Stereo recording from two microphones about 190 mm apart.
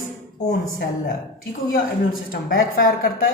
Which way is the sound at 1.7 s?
50° left (ahead or behind).